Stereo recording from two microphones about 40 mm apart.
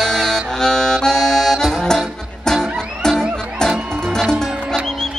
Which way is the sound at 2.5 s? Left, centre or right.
Centre.